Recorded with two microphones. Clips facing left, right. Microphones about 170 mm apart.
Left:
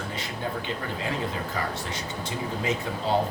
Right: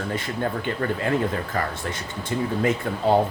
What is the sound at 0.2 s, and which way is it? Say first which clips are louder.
Speech: right 5 dB; 55° right (ahead or behind).